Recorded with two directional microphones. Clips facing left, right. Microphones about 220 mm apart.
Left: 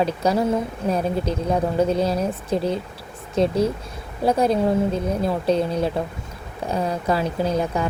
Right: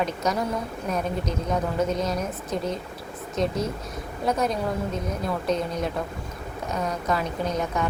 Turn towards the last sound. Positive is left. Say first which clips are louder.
# left 4 dB
turn(degrees=30)  # may be behind; listen again after turning